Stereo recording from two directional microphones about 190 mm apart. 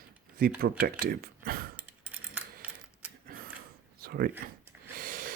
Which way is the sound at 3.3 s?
50° right (ahead or behind).